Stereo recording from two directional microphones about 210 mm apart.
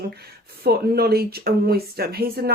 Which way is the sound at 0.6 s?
50° right (ahead or behind).